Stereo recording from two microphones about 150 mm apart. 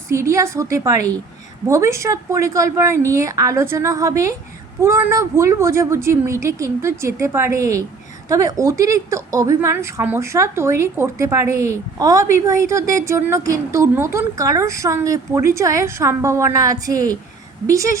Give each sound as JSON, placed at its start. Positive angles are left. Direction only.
{"t": 0.1, "sound": "a woman's voice", "side_deg": -20}